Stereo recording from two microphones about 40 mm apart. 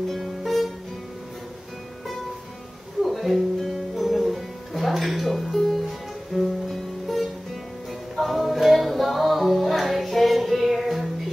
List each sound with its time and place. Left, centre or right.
0.2 s music: centre
3.0 s music: centre